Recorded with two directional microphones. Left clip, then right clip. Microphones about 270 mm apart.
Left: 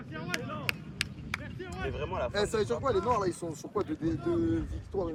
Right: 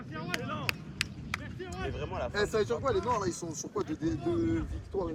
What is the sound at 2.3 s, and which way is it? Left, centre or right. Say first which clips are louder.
Speech: right 2 dB; centre.